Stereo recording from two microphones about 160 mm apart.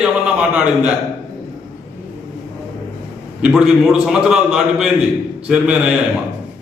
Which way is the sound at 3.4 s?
5° right (ahead or behind).